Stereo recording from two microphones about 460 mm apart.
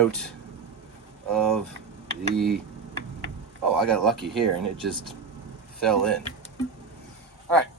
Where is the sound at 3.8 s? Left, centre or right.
Centre.